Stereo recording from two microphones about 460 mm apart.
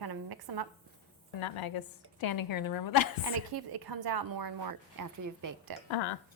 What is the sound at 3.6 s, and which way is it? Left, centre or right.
Speech, right.